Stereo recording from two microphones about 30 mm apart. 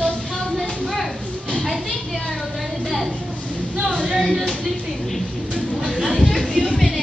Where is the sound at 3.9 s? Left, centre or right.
Right.